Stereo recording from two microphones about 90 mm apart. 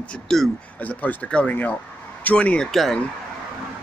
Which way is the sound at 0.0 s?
10° left (ahead or behind).